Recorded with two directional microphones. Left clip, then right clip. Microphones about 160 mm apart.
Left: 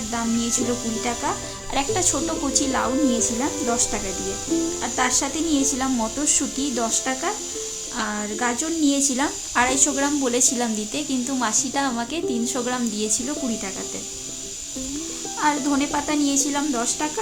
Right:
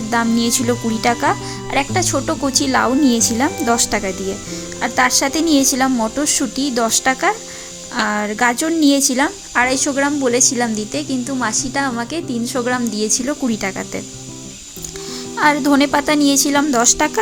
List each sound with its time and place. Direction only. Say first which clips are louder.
0.1 s a woman's voice: right 9 dB; 50° right (ahead or behind)
1.7 s a woman's voice: right 5 dB; 30° right (ahead or behind)
13.1 s a woman's voice: right 6 dB; 50° right (ahead or behind)
15.4 s a woman's voice: right 8 dB; 55° right (ahead or behind)